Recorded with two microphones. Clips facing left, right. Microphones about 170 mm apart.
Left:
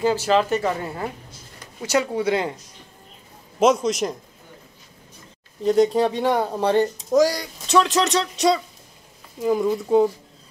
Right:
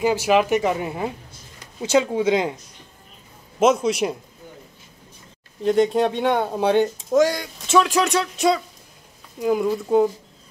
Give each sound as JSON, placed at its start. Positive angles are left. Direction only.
{"t": 0.0, "sound": "speech", "side_deg": -15}
{"t": 3.5, "sound": "speech", "side_deg": -5}
{"t": 5.6, "sound": "speech", "side_deg": 0}